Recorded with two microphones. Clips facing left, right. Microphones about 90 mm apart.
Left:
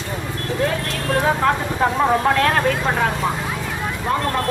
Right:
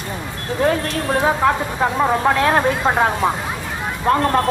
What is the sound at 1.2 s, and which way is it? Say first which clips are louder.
Speech: right 1 dB; 10° right (ahead or behind).